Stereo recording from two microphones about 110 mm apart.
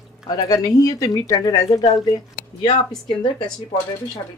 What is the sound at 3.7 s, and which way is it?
Speech, 60° left (ahead or behind).